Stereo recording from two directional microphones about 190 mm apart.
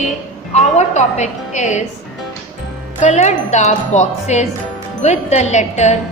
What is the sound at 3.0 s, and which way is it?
Speech, 40° left (ahead or behind).